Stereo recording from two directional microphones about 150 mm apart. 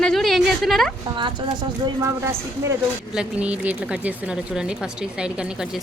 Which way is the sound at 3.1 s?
5° right (ahead or behind).